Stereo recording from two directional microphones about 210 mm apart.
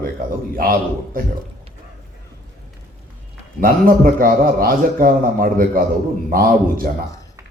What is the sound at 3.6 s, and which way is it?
A man's voice, 40° right (ahead or behind).